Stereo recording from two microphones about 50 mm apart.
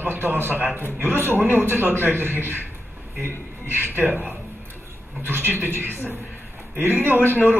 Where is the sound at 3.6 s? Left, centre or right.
Right.